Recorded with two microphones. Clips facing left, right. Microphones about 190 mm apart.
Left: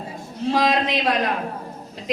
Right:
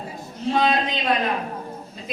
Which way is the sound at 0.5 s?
80° left.